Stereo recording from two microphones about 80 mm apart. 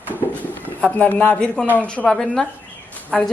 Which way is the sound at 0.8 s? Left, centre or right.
Centre.